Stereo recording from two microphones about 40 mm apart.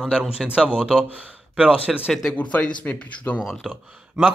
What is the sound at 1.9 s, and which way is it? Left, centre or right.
Speech, centre.